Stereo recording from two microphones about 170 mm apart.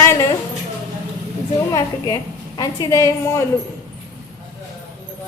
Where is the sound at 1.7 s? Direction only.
20° left (ahead or behind).